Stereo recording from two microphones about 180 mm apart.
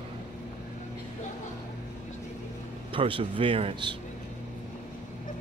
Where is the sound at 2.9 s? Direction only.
30° right (ahead or behind).